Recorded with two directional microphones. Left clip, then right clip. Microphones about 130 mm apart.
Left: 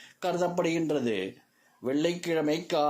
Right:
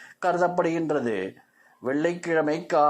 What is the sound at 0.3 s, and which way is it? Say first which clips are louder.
Speech: right 5 dB; 15° left (ahead or behind).